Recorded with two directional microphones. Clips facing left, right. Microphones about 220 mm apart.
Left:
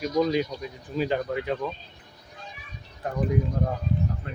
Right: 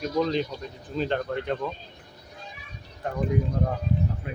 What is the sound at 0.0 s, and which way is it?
Speech, 10° left (ahead or behind).